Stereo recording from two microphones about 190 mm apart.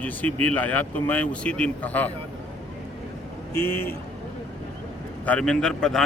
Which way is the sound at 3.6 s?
10° left (ahead or behind).